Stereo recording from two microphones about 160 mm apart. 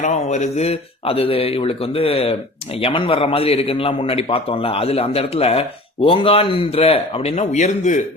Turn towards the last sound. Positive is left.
turn(degrees=50)  # may be behind; listen again after turning